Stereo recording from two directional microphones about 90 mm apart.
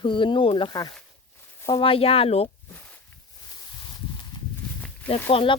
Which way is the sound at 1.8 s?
90° left.